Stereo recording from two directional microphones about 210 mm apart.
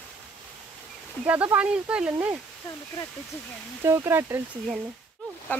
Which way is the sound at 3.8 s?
10° right (ahead or behind).